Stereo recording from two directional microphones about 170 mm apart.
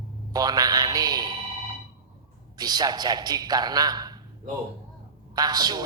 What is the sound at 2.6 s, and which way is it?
A woman's voice, 25° right (ahead or behind).